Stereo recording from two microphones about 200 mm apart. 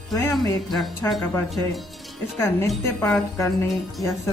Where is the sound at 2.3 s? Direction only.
15° left (ahead or behind).